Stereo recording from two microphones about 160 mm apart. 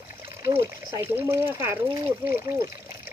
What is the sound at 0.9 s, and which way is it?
Speech, 15° right (ahead or behind).